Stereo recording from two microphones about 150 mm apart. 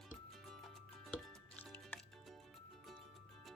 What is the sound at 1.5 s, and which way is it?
Music, 10° left (ahead or behind).